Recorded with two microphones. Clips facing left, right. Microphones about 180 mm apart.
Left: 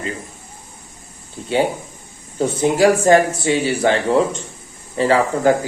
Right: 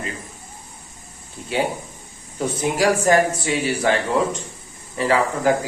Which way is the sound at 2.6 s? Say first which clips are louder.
Left 5 dB; 25° left (ahead or behind).